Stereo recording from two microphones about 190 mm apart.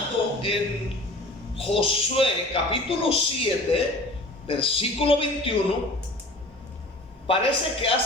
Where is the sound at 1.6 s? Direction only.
30° left (ahead or behind).